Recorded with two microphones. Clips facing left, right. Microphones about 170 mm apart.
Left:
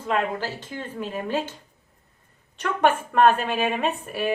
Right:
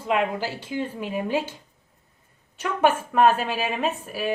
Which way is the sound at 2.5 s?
5° right (ahead or behind).